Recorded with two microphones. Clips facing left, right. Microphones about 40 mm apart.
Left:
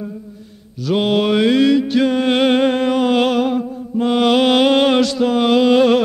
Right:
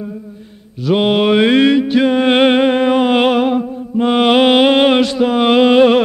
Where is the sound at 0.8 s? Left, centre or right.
Right.